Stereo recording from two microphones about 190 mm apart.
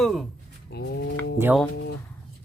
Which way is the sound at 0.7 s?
60° left (ahead or behind).